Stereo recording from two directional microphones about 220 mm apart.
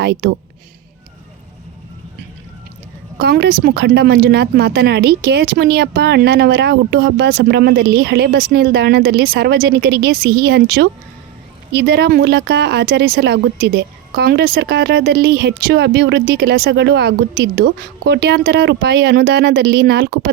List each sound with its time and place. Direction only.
0.0 s speech: 45° right (ahead or behind)
3.2 s speech: 45° right (ahead or behind)